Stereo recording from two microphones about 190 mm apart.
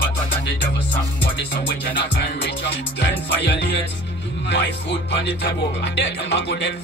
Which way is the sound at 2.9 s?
70° left (ahead or behind).